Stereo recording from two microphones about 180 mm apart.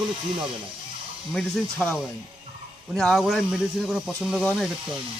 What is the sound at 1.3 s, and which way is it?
A man's voice, 5° left (ahead or behind).